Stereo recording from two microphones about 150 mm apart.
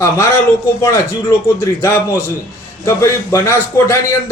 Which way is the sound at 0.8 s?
20° left (ahead or behind).